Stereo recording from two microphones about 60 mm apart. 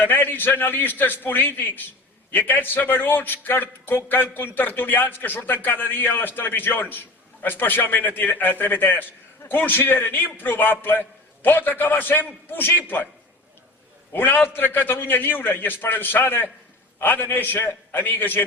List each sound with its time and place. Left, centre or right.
0.0 s a man's voice: left
14.1 s a man's voice: left